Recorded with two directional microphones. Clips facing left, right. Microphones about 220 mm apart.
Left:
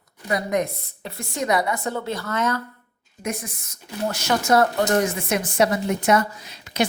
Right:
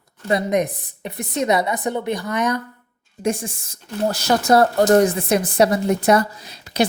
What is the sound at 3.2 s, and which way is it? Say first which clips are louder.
A woman's voice: right 7 dB; 30° right (ahead or behind).